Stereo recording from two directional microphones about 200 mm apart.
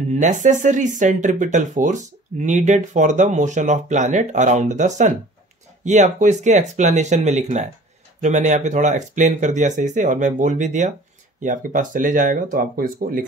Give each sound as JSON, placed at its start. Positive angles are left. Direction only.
{"t": 0.1, "sound": "speech", "side_deg": -35}